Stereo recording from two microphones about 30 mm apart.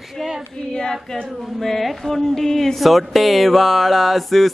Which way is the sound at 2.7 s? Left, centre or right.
Centre.